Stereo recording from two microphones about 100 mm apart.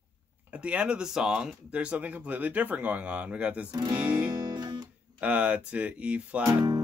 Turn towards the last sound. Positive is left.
turn(degrees=-15)  # may be behind; listen again after turning